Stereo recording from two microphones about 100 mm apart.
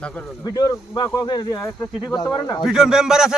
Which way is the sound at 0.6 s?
40° left (ahead or behind).